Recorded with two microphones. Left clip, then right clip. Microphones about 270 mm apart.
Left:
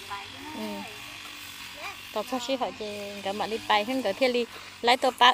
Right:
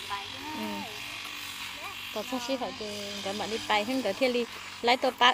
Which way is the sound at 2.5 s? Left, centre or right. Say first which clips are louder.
Left 3 dB; left.